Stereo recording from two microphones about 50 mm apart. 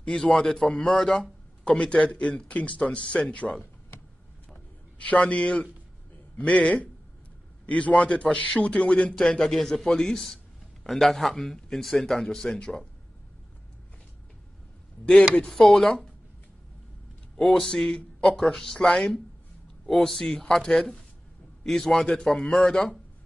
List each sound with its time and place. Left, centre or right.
0.1 s a man's voice: centre
1.6 s speech: left
4.9 s a man's voice: left
15.3 s a man's voice: centre
17.4 s a man's voice: centre